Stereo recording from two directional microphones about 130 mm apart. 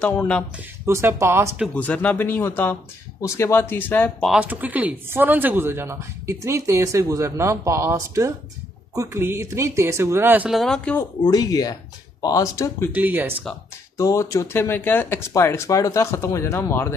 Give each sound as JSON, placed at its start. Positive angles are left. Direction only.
{"t": 0.0, "sound": "speech", "side_deg": 10}
{"t": 0.8, "sound": "speech", "side_deg": -20}
{"t": 1.8, "sound": "speech", "side_deg": 15}
{"t": 4.3, "sound": "speech", "side_deg": -10}
{"t": 10.5, "sound": "speech", "side_deg": 0}
{"t": 11.2, "sound": "speech", "side_deg": 30}
{"t": 12.9, "sound": "speech", "side_deg": -15}
{"t": 13.9, "sound": "speech", "side_deg": 25}